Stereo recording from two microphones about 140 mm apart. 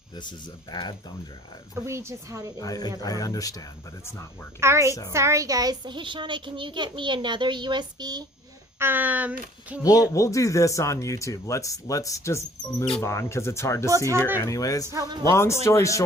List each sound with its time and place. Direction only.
0.2 s speech: 30° left (ahead or behind)
1.7 s a woman's voice: 20° right (ahead or behind)
2.6 s speech: 25° left (ahead or behind)
4.6 s a woman's voice: 20° right (ahead or behind)
8.8 s speech: 15° right (ahead or behind)
9.8 s speech: 25° left (ahead or behind)
14.8 s a woman's voice: 25° right (ahead or behind)
15.2 s speech: 20° left (ahead or behind)